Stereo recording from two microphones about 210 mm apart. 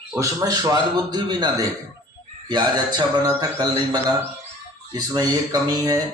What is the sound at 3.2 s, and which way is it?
A man's voice, 20° right (ahead or behind).